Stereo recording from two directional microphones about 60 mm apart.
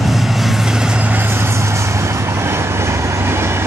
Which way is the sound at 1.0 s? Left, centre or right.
Right.